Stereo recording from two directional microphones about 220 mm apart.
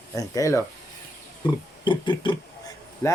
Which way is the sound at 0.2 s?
15° left (ahead or behind).